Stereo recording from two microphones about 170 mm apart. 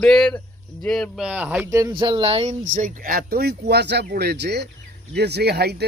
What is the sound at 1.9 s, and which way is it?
Speech, 30° right (ahead or behind).